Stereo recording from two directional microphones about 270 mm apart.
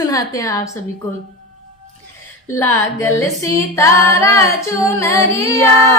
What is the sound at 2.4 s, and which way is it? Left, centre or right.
A woman's voice, centre.